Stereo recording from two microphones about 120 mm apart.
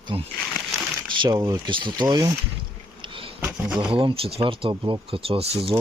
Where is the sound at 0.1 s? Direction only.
50° right (ahead or behind).